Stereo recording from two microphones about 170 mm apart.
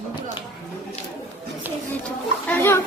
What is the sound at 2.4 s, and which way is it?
Speech, 10° left (ahead or behind).